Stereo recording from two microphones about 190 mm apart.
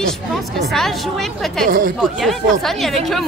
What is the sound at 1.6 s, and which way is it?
Speech, 45° right (ahead or behind).